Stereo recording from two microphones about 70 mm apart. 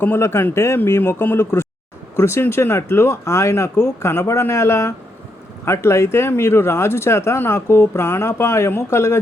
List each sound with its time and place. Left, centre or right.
0.0 s speech: left